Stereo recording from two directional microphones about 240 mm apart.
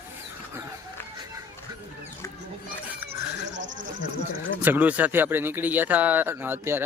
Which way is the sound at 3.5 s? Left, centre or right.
Right.